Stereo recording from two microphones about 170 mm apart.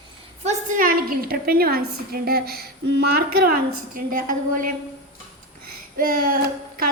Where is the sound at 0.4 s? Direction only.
50° right (ahead or behind).